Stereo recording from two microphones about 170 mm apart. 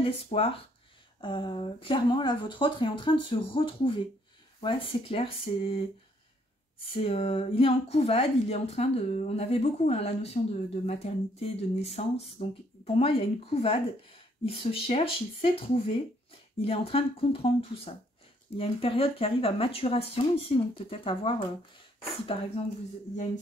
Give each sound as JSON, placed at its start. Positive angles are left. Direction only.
{"t": 0.0, "sound": "speech", "side_deg": 35}